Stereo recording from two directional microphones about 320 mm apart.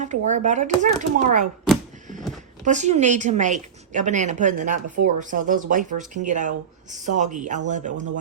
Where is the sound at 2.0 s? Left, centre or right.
Right.